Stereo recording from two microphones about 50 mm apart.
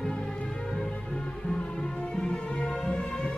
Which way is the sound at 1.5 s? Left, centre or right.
Centre.